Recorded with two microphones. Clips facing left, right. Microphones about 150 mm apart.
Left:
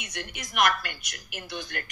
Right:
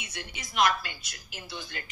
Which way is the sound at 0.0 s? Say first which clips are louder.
Left 3 dB; 60° left (ahead or behind).